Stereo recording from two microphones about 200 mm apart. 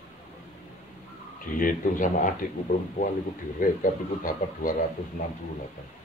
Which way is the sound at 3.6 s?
45° left (ahead or behind).